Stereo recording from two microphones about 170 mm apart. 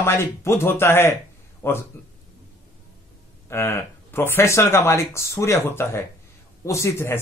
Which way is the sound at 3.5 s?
15° left (ahead or behind).